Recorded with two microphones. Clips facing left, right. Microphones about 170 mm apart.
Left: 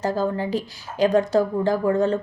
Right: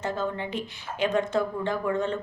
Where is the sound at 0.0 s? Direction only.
35° left (ahead or behind).